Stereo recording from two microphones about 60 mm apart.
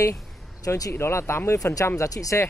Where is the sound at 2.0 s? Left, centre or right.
Left.